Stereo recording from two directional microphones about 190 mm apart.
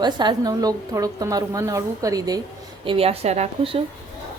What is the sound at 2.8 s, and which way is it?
Speech, 30° right (ahead or behind).